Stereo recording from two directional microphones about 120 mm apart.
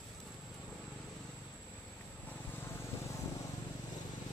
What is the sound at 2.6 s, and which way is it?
Vehicle, 20° left (ahead or behind).